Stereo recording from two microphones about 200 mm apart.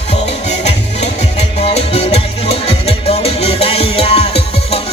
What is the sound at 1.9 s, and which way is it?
Music, 30° left (ahead or behind).